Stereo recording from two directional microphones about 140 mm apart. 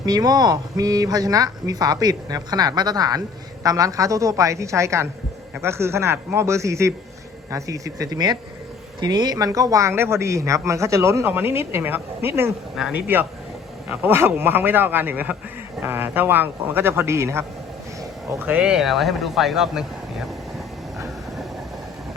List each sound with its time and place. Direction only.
0.0 s a man's voice: 30° right (ahead or behind); by 20.2 s centre (ahead or behind)